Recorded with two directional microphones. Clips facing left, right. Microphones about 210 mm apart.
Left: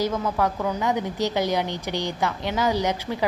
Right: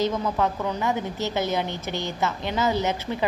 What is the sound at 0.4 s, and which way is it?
A woman's voice, 10° left (ahead or behind).